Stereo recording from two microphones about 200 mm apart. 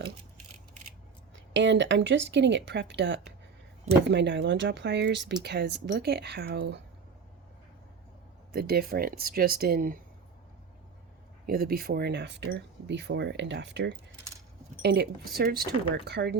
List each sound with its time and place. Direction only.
1.3 s speech: 65° right (ahead or behind)
8.5 s speech: 50° right (ahead or behind)
11.4 s speech: 45° right (ahead or behind)